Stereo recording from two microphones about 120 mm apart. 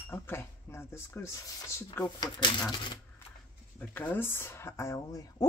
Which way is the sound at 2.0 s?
35° left (ahead or behind).